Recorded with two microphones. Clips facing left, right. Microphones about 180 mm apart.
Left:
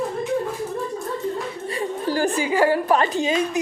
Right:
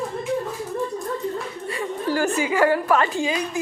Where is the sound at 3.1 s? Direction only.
20° left (ahead or behind).